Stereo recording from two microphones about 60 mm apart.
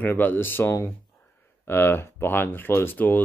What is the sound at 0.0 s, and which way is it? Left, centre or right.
Speech, left.